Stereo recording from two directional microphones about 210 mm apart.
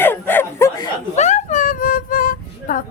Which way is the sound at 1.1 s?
35° left (ahead or behind).